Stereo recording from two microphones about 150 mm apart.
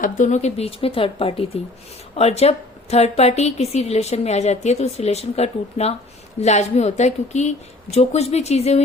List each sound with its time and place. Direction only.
0.0 s a woman's voice: 55° left (ahead or behind)